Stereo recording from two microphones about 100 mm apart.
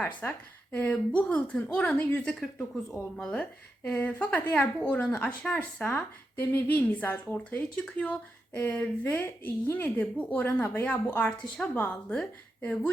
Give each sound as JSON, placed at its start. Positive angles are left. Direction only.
{"t": 0.2, "sound": "speech", "side_deg": 15}
{"t": 2.4, "sound": "speech", "side_deg": 5}